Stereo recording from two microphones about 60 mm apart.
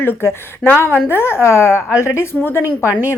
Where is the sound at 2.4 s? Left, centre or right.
Left.